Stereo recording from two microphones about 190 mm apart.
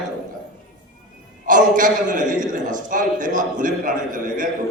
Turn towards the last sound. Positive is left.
turn(degrees=-45)  # may be behind; listen again after turning